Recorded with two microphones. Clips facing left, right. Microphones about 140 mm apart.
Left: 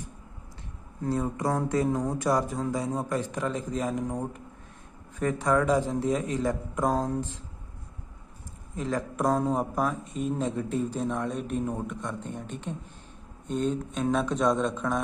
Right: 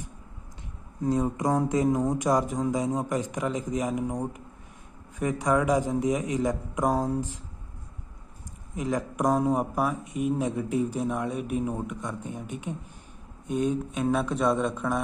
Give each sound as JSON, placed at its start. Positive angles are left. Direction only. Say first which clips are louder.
{"t": 1.0, "sound": "speech", "louder": "right 3 dB", "side_deg": -20}
{"t": 5.2, "sound": "speech", "louder": "even", "side_deg": -15}
{"t": 8.7, "sound": "speech", "louder": "right 1 dB", "side_deg": -15}